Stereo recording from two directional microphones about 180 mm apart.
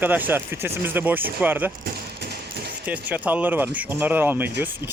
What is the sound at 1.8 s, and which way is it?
Tap, 65° right (ahead or behind).